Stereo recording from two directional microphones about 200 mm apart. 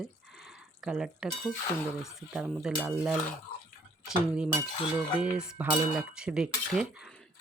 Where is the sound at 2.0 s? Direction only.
Centre (ahead or behind).